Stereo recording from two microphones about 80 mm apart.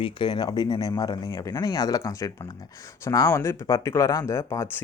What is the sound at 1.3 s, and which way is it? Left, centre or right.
Speech, left.